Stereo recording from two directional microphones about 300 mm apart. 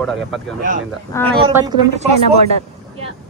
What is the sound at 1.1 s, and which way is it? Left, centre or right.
Speech, centre.